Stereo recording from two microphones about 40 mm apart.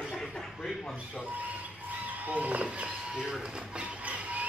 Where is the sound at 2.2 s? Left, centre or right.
Right.